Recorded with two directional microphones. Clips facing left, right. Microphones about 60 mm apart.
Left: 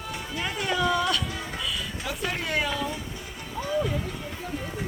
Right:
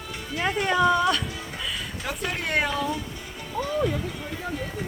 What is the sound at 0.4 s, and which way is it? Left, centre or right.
Speech, right.